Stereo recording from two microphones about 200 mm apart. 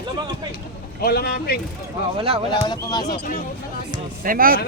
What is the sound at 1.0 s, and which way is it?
Speech, 50° left (ahead or behind).